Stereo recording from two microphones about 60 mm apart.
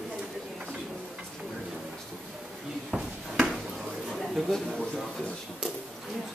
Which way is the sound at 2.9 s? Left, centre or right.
Centre.